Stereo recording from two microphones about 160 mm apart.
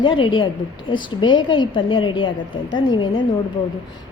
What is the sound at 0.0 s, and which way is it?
A woman's voice, 35° left (ahead or behind).